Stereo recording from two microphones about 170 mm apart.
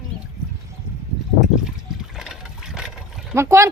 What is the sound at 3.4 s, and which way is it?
Speech, 15° right (ahead or behind).